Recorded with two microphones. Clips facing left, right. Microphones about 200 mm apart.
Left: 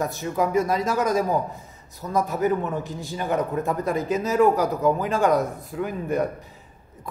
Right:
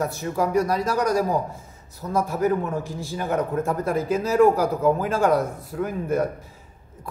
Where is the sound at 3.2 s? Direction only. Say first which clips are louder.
Even; centre (ahead or behind).